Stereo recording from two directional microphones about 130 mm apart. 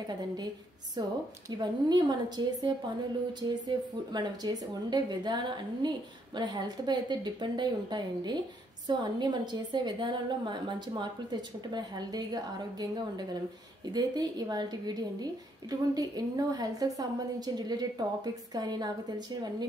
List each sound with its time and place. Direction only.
1.5 s a woman's voice: 35° right (ahead or behind)